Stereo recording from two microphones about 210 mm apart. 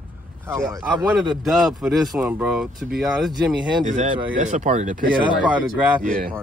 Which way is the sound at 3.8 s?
35° right (ahead or behind).